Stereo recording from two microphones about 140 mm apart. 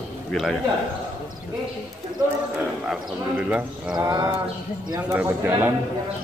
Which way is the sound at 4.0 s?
25° right (ahead or behind).